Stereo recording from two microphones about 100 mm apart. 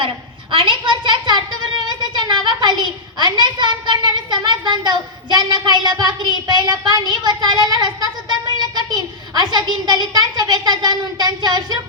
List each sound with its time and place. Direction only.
0.5 s a woman's voice: 55° right (ahead or behind)